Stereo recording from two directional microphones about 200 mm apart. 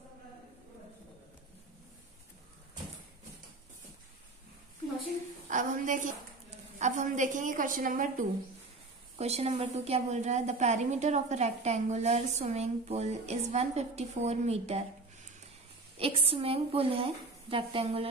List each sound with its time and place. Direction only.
5.5 s a woman's voice: 40° right (ahead or behind)
9.2 s a woman's voice: 30° right (ahead or behind)
16.0 s a woman's voice: 30° right (ahead or behind)